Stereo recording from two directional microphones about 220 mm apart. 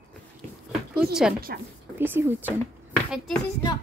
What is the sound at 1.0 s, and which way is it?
A woman's voice, 5° right (ahead or behind).